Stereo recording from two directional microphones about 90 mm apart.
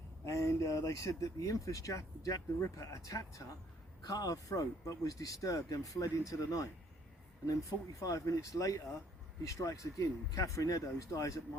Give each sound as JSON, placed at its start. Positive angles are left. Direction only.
{"t": 0.3, "sound": "speech", "side_deg": 35}
{"t": 7.9, "sound": "speech", "side_deg": 40}